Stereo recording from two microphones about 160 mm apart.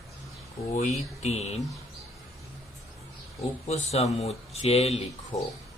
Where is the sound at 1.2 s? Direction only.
45° left (ahead or behind).